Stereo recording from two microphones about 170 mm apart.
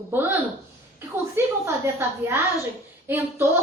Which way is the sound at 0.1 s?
15° right (ahead or behind).